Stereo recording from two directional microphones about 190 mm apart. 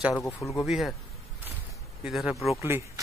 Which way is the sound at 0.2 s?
15° left (ahead or behind).